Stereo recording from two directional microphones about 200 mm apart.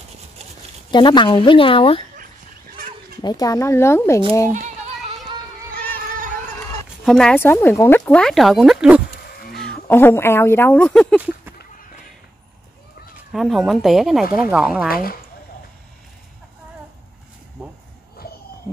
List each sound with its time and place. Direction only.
0.9 s speech: 25° left (ahead or behind)
3.2 s speech: 20° left (ahead or behind)
4.5 s speech: 40° right (ahead or behind)
7.1 s speech: 5° left (ahead or behind)
11.1 s speech: 5° right (ahead or behind)
13.3 s speech: centre (ahead or behind)
14.9 s speech: 45° left (ahead or behind)